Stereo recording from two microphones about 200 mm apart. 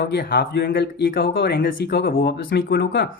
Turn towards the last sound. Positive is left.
turn(degrees=55)  # may be behind; listen again after turning